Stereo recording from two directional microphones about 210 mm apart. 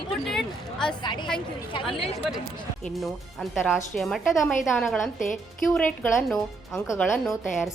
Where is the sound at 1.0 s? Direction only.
20° left (ahead or behind).